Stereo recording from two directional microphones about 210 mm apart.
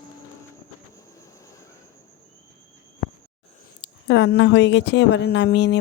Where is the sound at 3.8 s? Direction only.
60° left (ahead or behind).